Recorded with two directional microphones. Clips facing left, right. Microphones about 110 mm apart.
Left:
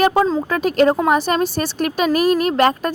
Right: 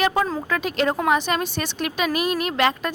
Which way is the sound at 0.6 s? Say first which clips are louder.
Left 9 dB; 40° left (ahead or behind).